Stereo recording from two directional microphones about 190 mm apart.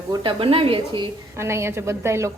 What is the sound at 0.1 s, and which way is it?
Speech, 25° right (ahead or behind).